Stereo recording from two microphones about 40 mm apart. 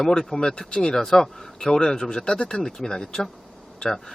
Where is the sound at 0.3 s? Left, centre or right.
Left.